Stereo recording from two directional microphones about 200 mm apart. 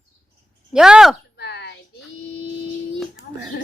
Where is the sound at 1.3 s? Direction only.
55° left (ahead or behind).